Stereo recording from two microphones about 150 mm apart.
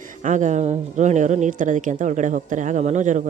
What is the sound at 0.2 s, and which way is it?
Speech, 55° right (ahead or behind).